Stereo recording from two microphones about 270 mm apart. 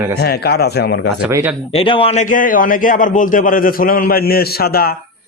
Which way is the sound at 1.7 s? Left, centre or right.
Centre.